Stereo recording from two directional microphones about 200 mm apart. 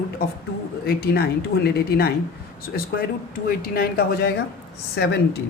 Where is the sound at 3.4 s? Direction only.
50° left (ahead or behind).